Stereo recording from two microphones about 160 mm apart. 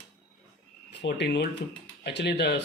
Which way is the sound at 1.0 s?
90° left.